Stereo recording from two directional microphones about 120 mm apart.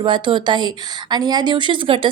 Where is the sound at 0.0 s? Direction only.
45° right (ahead or behind).